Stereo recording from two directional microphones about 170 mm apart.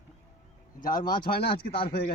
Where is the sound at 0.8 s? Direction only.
55° left (ahead or behind).